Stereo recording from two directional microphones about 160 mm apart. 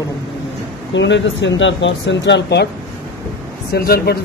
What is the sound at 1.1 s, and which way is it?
Speech, 90° left.